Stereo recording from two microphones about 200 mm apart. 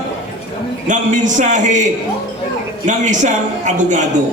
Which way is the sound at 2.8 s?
40° right (ahead or behind).